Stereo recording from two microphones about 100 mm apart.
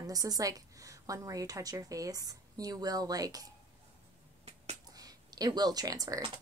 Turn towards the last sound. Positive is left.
turn(degrees=-35)  # may be behind; listen again after turning